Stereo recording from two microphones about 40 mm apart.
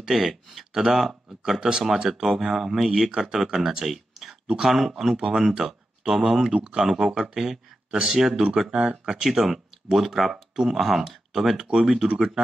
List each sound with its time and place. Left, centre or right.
0.0 s speech: centre
3.8 s speech: centre
6.5 s speech: right; by 8.4 s centre
8.6 s speech: right
9.0 s speech: centre